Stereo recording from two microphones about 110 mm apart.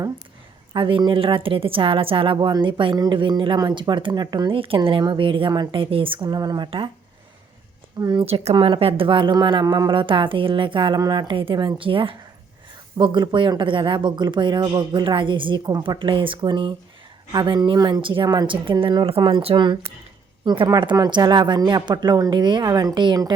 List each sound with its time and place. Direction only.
0.7 s a woman's voice: 50° right (ahead or behind)
4.5 s a woman's voice: 55° right (ahead or behind)
6.7 s a woman's voice: 50° right (ahead or behind)
7.9 s speech: 35° right (ahead or behind)
8.2 s speech: 65° right (ahead or behind)
8.5 s a woman's voice: 50° right (ahead or behind)
20.4 s a woman's voice: 45° right (ahead or behind)